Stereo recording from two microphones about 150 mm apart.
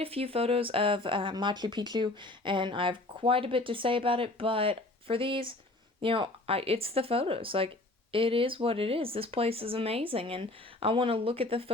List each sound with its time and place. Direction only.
0.0 s speech: 40° right (ahead or behind)